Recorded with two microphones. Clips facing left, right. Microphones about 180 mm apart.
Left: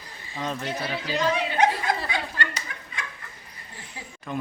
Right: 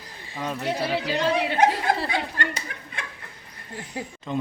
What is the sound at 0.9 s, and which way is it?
Speech, 65° right (ahead or behind).